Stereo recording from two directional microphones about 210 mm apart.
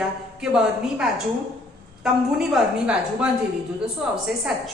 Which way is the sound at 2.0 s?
Centre (ahead or behind).